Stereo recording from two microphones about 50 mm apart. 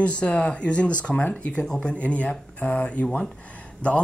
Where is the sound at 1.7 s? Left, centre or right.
Centre.